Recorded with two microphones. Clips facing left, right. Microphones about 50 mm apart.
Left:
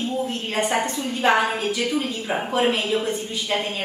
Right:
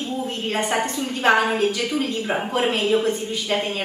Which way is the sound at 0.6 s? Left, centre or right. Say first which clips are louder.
Even; centre.